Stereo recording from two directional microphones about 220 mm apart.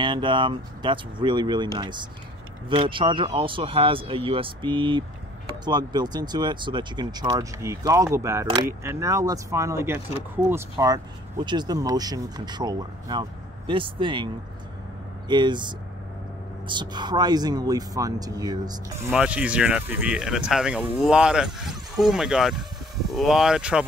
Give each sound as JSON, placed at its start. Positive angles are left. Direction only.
{"t": 0.0, "sound": "speech", "side_deg": -20}
{"t": 19.0, "sound": "speech", "side_deg": -5}